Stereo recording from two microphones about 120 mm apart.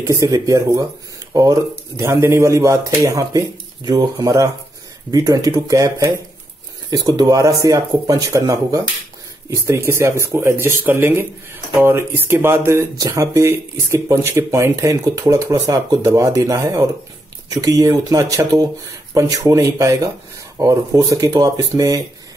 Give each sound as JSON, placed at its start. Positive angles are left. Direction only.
{"t": 0.0, "sound": "speech", "side_deg": -25}